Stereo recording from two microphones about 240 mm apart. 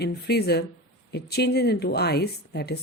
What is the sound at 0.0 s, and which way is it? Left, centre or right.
Speech, left.